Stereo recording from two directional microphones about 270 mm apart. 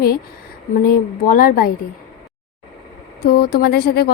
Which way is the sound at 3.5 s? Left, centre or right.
Left.